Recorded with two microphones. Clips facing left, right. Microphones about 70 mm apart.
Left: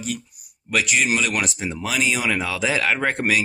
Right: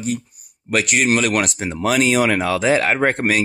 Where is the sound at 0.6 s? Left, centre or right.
Right.